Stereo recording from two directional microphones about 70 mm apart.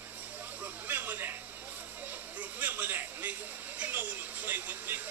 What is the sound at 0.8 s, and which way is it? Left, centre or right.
Speech, right.